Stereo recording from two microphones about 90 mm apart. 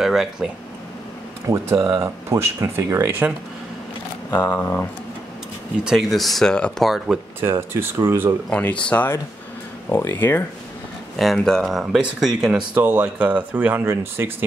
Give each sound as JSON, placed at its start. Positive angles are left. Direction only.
{"t": 0.0, "sound": "speech", "side_deg": -5}
{"t": 1.4, "sound": "speech", "side_deg": -35}
{"t": 4.3, "sound": "speech", "side_deg": 20}
{"t": 5.9, "sound": "speech", "side_deg": 0}
{"t": 7.3, "sound": "speech", "side_deg": -25}
{"t": 8.5, "sound": "speech", "side_deg": 15}
{"t": 11.1, "sound": "speech", "side_deg": 0}